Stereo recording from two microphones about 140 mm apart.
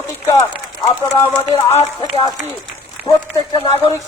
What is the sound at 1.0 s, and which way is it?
Speech, 15° right (ahead or behind).